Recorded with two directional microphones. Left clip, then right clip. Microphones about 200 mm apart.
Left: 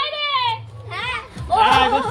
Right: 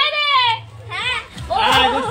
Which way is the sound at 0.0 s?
30° right (ahead or behind).